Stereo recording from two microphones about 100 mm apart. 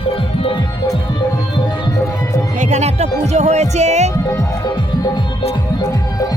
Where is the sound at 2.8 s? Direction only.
90° right.